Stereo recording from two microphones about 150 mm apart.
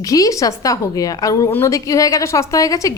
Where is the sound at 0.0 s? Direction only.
25° left (ahead or behind).